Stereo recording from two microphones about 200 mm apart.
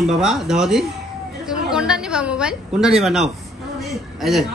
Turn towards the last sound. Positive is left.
turn(degrees=0)  # may be behind; listen again after turning